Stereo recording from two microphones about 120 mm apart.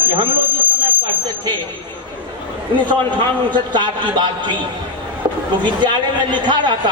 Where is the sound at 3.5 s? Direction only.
40° right (ahead or behind).